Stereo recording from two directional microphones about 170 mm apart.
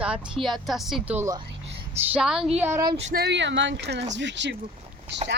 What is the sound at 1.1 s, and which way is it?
Speech, 20° right (ahead or behind).